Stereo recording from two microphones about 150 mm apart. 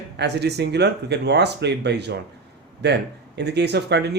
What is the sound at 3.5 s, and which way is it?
Speech, 90° right.